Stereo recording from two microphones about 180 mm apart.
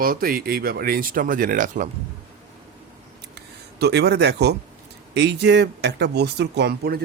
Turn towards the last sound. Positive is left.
turn(degrees=-60)  # may be behind; listen again after turning